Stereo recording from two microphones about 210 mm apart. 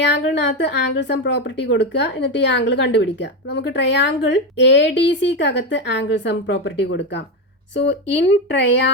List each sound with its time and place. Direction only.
0.0 s speech: 55° left (ahead or behind)